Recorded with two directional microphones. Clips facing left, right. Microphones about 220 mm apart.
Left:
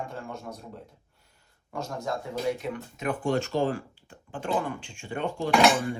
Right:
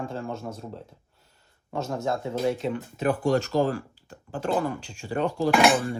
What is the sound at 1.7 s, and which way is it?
Speech, 25° right (ahead or behind).